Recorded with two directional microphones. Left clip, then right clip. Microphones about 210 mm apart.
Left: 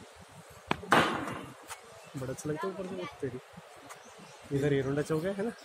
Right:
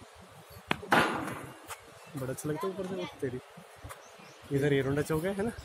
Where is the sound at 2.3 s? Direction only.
35° right (ahead or behind).